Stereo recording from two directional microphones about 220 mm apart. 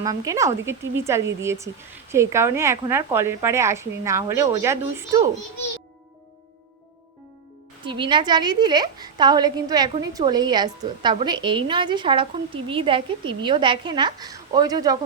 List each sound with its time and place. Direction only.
0.0 s a woman's voice: 15° right (ahead or behind)
7.9 s a woman's voice: 20° right (ahead or behind)